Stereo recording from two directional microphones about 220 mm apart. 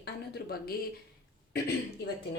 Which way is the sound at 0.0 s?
45° left (ahead or behind).